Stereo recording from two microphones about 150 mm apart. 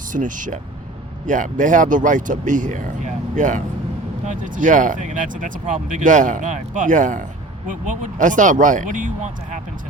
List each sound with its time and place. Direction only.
0.1 s speech: 60° right (ahead or behind)